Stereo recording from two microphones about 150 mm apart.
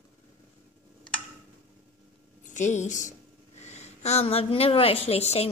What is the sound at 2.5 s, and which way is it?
A woman's voice, 55° left (ahead or behind).